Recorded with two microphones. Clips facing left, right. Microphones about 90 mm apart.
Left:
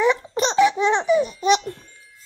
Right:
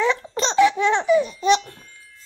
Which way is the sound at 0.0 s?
15° left (ahead or behind).